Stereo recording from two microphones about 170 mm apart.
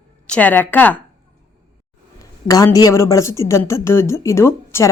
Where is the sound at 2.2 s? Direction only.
20° left (ahead or behind).